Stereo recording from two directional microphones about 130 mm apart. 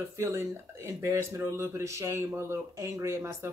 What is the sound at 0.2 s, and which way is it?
Speech, 20° right (ahead or behind).